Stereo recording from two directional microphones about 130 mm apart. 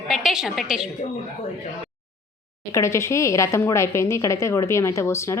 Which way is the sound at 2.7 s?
20° left (ahead or behind).